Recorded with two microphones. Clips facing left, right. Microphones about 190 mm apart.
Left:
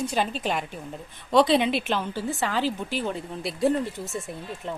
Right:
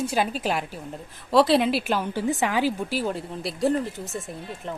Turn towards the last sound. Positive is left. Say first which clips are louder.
# even
turn(degrees=0)  # may be behind; listen again after turning